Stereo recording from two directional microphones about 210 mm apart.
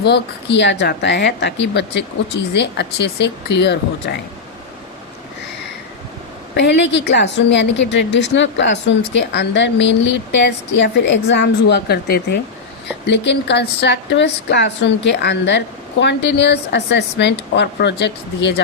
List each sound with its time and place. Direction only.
0.0 s speech: 55° left (ahead or behind)
6.5 s speech: 55° left (ahead or behind)